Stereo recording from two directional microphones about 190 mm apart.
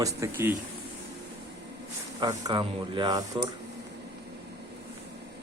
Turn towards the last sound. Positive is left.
turn(degrees=-20)  # may be behind; listen again after turning